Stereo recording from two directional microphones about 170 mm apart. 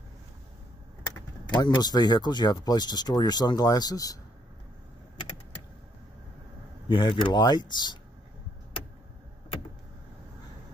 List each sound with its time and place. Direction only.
1.1 s speech: 25° left (ahead or behind)
6.9 s speech: 30° left (ahead or behind)